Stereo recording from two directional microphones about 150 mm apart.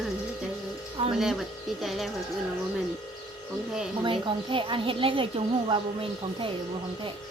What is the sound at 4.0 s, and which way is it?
A woman's voice, 35° right (ahead or behind).